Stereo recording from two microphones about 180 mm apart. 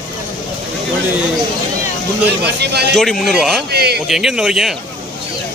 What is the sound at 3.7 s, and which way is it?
Speech, 65° right (ahead or behind).